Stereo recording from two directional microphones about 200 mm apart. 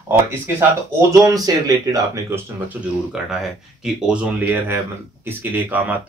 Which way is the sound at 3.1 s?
Centre (ahead or behind).